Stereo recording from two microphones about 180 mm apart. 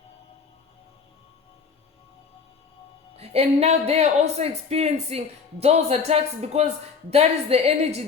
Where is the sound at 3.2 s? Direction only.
35° right (ahead or behind).